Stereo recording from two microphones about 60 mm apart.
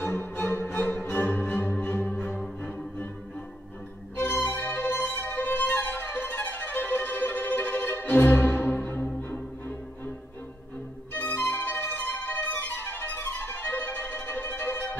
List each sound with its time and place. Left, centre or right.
0.0 s music: left
4.2 s music: left
11.1 s music: left